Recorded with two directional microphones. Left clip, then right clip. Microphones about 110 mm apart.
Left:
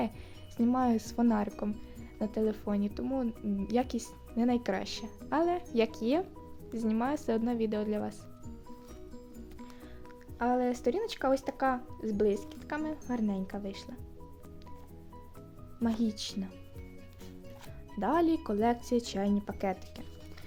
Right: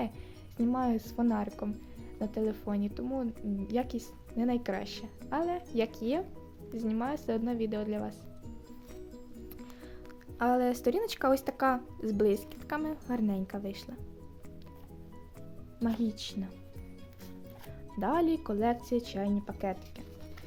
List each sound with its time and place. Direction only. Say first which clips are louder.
0.5 s speech: left 2 dB; 25° left (ahead or behind)
10.3 s speech: right 1 dB; 15° right (ahead or behind)
15.8 s speech: left 1 dB; 15° left (ahead or behind)
18.0 s speech: left 1 dB; 10° left (ahead or behind); by 19.7 s 25° left (ahead or behind)